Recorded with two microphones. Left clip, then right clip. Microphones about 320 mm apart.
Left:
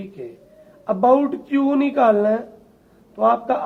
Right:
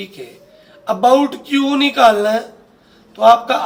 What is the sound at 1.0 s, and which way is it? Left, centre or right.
A man's voice, left.